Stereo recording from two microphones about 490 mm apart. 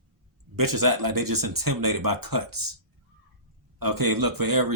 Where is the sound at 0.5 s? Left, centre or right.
Right.